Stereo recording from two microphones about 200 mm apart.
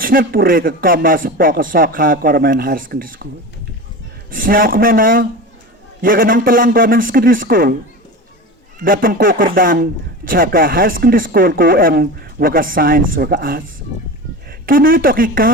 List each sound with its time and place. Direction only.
0.0 s speech: 45° right (ahead or behind)
4.3 s speech: 45° right (ahead or behind)
8.8 s speech: 45° right (ahead or behind)
14.7 s speech: 45° right (ahead or behind)